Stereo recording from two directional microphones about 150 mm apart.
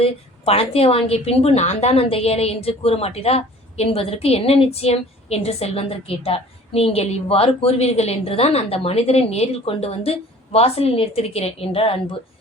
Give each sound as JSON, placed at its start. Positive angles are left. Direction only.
{"t": 0.0, "sound": "a woman's voice", "side_deg": 40}